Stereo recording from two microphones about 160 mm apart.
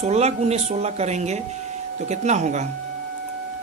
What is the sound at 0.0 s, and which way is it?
Speech, 40° right (ahead or behind).